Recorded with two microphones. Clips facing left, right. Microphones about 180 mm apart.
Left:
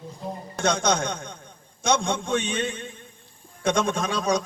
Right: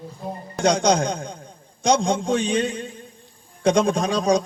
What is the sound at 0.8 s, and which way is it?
A man's voice, 35° right (ahead or behind).